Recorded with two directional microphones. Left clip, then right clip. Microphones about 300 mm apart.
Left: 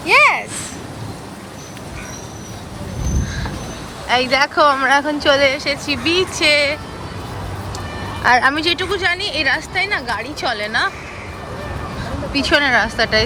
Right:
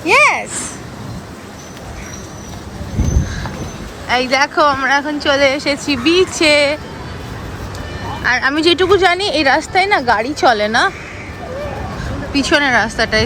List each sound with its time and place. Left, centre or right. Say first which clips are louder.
0.0 s a sound: right 1 dB; centre
4.1 s speech: right 1 dB; centre
8.2 s speech: even; centre
12.3 s speech: right 2 dB; centre